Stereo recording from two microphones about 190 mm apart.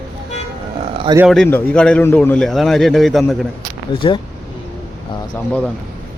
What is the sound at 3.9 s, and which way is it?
Speech, 25° left (ahead or behind).